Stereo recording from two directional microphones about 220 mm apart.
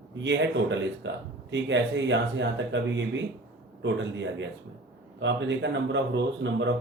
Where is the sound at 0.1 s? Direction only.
55° right (ahead or behind).